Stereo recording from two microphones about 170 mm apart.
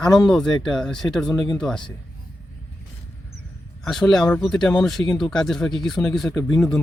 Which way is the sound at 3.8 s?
Centre (ahead or behind).